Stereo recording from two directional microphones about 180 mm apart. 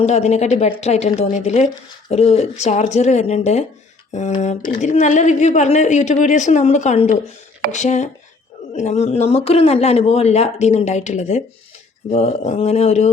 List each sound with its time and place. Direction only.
0.0 s speech: 40° left (ahead or behind)